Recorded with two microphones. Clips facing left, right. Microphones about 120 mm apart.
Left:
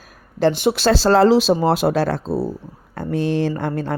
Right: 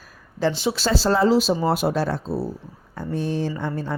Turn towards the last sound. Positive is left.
turn(degrees=70)  # may be behind; listen again after turning